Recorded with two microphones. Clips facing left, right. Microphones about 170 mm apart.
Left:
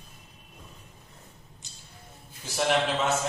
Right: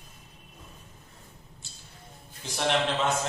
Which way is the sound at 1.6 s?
15° left (ahead or behind).